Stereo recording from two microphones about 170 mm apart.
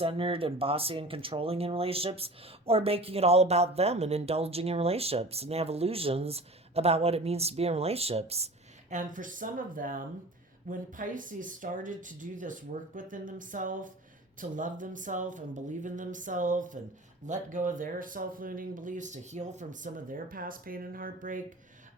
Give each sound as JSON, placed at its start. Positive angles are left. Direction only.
{"t": 0.0, "sound": "speech", "side_deg": -35}
{"t": 8.9, "sound": "speech", "side_deg": -50}